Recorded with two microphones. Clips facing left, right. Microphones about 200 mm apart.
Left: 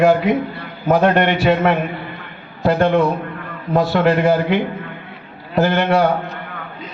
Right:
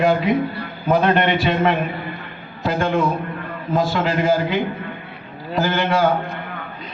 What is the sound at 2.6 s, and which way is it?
A man's voice, 60° left (ahead or behind).